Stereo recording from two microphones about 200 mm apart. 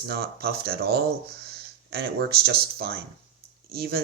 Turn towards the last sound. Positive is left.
turn(degrees=-50)  # may be behind; listen again after turning